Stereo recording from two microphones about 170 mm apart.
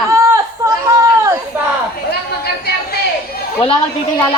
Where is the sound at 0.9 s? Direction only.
20° right (ahead or behind).